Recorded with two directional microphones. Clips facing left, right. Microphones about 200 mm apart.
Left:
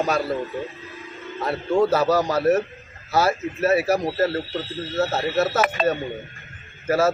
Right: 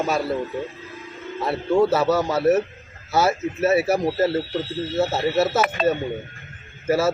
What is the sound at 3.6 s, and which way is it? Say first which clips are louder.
Speech: right 1 dB; 25° right (ahead or behind).